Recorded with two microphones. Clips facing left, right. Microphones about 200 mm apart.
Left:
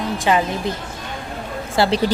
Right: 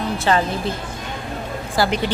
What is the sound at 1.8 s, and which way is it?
Speech, 30° left (ahead or behind).